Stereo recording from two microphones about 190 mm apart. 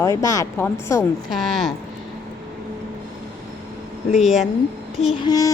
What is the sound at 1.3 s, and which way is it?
Speech, centre (ahead or behind).